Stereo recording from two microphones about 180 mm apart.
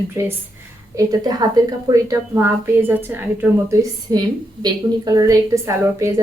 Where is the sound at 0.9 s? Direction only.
20° right (ahead or behind).